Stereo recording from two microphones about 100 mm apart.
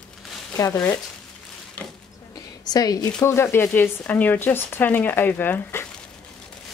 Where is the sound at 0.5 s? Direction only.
30° left (ahead or behind).